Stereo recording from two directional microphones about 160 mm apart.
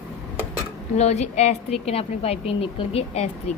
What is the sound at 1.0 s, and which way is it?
A woman's voice, 40° left (ahead or behind).